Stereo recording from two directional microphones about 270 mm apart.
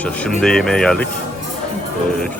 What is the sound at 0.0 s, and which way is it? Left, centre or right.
Speech, centre.